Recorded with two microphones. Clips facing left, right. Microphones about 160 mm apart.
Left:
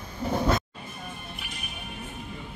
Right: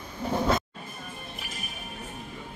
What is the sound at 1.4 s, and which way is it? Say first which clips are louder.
Music: right 1 dB; 40° right (ahead or behind).